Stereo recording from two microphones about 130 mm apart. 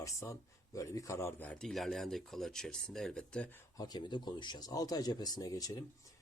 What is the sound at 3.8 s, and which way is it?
Speech, 30° left (ahead or behind).